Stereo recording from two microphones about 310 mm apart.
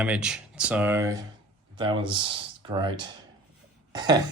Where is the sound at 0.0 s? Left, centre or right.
Centre.